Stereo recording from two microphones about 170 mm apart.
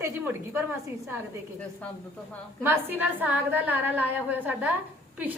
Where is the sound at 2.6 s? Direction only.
10° right (ahead or behind).